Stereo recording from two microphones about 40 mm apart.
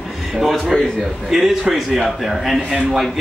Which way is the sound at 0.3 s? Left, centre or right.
Centre.